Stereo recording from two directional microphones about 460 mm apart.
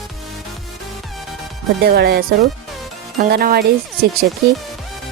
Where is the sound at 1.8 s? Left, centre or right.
Centre.